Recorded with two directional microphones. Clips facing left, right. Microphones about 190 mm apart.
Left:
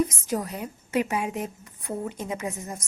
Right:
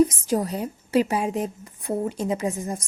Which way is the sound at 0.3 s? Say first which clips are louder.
Right 5 dB; 30° right (ahead or behind).